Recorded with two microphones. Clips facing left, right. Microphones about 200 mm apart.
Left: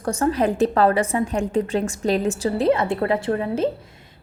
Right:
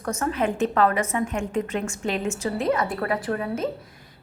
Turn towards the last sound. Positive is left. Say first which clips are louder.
# left 5 dB
turn(degrees=30)  # may be behind; listen again after turning